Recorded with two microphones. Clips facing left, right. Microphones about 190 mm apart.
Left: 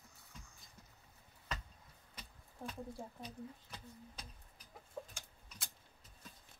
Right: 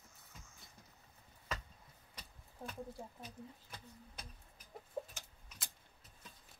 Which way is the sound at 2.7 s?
15° right (ahead or behind).